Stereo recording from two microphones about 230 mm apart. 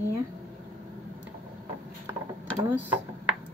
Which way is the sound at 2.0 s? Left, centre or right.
Centre.